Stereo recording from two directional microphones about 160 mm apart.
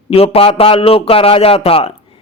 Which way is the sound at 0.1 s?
35° left (ahead or behind).